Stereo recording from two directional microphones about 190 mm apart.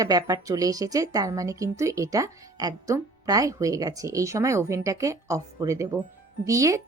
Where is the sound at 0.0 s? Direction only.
20° right (ahead or behind).